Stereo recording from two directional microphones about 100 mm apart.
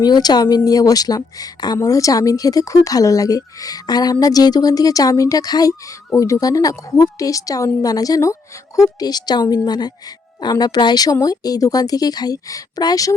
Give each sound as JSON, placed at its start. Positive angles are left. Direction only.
{"t": 0.0, "sound": "a woman's voice", "side_deg": 45}